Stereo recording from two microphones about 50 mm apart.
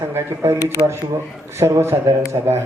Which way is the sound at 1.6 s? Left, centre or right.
Right.